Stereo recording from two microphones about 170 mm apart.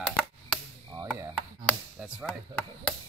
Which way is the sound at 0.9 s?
20° right (ahead or behind).